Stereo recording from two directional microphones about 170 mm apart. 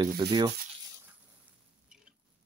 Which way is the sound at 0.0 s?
25° right (ahead or behind).